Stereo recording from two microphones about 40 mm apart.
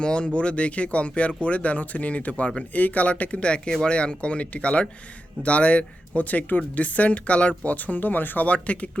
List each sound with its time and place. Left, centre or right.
0.0 s speech: left
8.4 s speech: left